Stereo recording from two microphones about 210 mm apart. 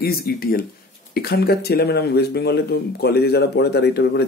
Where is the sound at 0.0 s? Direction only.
45° left (ahead or behind).